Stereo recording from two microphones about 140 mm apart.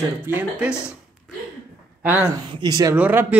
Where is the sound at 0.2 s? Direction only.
15° right (ahead or behind).